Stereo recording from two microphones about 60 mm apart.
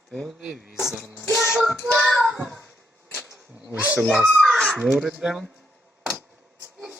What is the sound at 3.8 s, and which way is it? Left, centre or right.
Speech, right.